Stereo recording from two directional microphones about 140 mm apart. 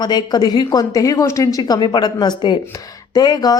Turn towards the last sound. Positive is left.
turn(degrees=25)  # may be behind; listen again after turning